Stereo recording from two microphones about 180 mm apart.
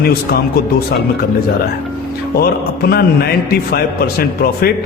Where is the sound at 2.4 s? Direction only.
60° left (ahead or behind).